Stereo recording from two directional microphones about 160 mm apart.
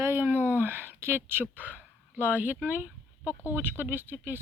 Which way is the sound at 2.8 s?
15° left (ahead or behind).